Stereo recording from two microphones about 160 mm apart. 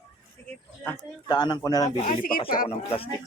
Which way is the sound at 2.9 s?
35° left (ahead or behind).